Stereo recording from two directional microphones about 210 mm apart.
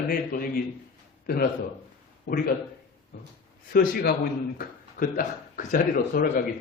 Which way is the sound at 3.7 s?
45° left (ahead or behind).